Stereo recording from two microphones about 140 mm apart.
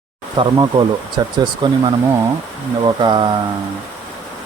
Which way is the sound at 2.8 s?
30° right (ahead or behind).